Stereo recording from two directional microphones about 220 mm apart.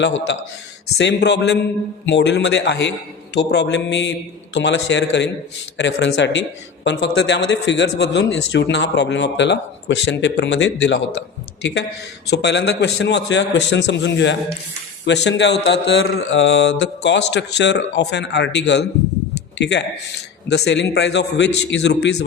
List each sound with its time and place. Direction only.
0.0 s a man's voice: 55° left (ahead or behind)